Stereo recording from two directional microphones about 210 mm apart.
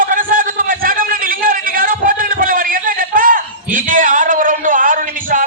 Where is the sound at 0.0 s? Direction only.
40° right (ahead or behind).